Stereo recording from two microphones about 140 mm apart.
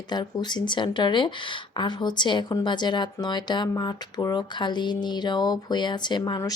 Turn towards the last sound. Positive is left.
turn(degrees=30)  # may be behind; listen again after turning